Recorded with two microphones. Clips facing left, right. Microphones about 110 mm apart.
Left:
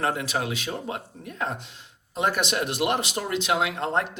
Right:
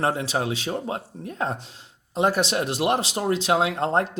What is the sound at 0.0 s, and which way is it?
Speech, 30° right (ahead or behind).